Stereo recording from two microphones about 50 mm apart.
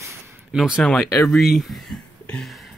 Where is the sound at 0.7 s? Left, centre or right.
Centre.